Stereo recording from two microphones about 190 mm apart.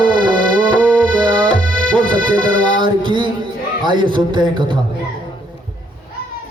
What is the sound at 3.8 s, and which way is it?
Speech, 25° right (ahead or behind).